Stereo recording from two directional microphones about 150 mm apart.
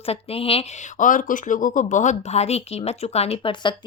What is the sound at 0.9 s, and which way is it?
A woman's voice, 60° left (ahead or behind).